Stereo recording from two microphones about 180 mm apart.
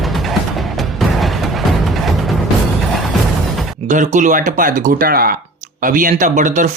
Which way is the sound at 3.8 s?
40° right (ahead or behind).